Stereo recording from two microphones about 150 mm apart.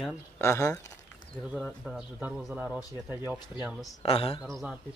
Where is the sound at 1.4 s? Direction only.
5° right (ahead or behind).